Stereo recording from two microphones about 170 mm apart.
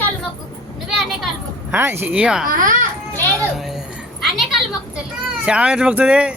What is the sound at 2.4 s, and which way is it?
Speech, 55° right (ahead or behind).